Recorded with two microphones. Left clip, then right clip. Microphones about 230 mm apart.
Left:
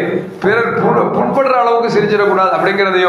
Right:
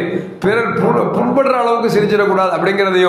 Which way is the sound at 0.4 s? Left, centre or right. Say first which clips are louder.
Left 2 dB; right.